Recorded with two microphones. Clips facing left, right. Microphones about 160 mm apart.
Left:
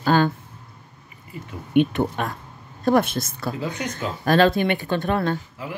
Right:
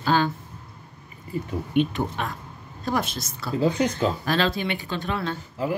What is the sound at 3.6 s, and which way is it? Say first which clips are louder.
Speech: right 11 dB; 35° right (ahead or behind).